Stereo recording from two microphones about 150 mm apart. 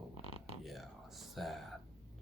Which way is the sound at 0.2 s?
40° left (ahead or behind).